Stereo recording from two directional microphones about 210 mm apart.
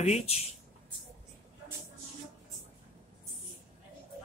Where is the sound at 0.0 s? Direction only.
30° left (ahead or behind).